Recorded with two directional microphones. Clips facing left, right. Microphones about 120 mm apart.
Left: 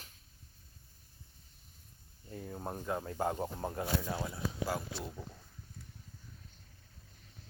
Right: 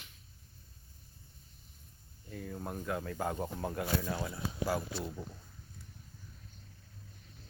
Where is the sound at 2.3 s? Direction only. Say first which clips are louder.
Even; 25° left (ahead or behind).